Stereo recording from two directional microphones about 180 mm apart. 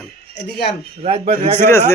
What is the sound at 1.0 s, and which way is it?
Speech, 35° right (ahead or behind).